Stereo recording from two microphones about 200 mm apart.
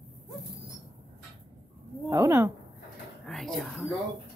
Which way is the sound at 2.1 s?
15° right (ahead or behind).